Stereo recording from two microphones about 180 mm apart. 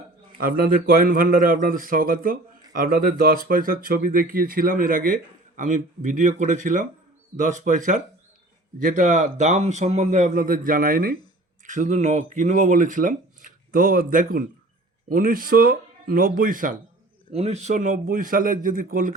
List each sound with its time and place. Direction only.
0.3 s speech: 55° right (ahead or behind)
17.3 s speech: 35° right (ahead or behind)